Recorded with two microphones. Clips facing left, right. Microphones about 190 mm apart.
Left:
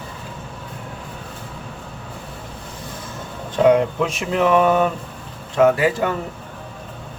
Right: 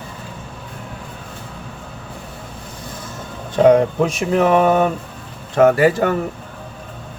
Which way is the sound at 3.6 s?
40° right (ahead or behind).